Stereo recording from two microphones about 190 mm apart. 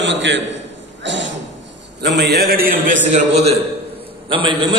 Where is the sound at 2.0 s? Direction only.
60° right (ahead or behind).